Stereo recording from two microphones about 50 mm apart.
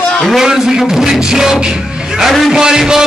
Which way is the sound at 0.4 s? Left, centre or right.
Centre.